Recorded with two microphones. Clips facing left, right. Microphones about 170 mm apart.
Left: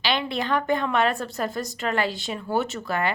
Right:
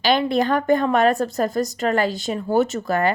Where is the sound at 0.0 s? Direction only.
45° right (ahead or behind).